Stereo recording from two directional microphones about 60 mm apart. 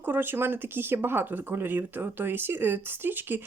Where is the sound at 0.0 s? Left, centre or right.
Right.